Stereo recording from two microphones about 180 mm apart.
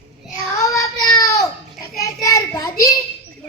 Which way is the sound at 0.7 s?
20° left (ahead or behind).